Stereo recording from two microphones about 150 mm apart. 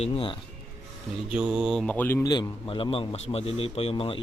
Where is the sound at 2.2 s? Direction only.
30° left (ahead or behind).